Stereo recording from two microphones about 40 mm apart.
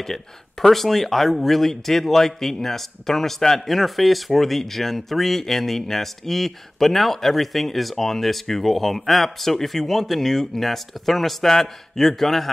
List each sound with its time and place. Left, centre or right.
0.0 s speech: centre